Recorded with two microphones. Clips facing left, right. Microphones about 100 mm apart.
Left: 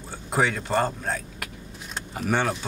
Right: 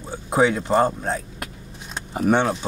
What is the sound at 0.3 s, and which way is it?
Speech, 25° right (ahead or behind).